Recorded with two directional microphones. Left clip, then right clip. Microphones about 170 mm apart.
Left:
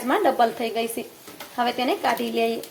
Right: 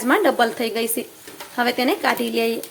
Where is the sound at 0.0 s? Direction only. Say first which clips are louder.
Right 3 dB; 25° right (ahead or behind).